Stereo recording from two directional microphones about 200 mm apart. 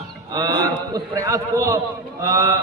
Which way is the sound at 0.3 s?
20° right (ahead or behind).